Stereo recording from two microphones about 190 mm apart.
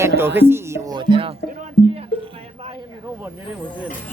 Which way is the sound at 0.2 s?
10° right (ahead or behind).